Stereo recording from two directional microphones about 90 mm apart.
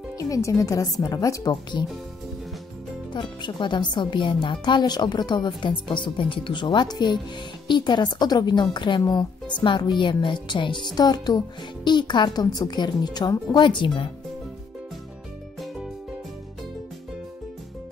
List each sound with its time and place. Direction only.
0.2 s a woman's voice: 40° left (ahead or behind)
1.5 s speech: 60° left (ahead or behind)
3.1 s speech: 60° left (ahead or behind)
11.0 s speech: 50° left (ahead or behind)
13.5 s speech: 60° left (ahead or behind)